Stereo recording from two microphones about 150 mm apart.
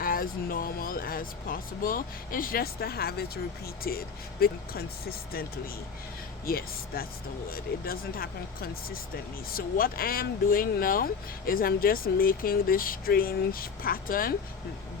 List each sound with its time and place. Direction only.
0.0 s speech: 75° left (ahead or behind); by 5.5 s 90° left
6.4 s speech: 80° left